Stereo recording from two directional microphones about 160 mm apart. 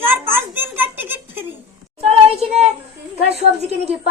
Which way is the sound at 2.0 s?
40° right (ahead or behind).